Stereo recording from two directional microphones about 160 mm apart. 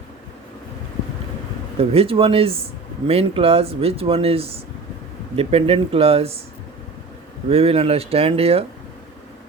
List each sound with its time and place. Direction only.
1.8 s speech: 40° right (ahead or behind)
7.5 s speech: 40° right (ahead or behind)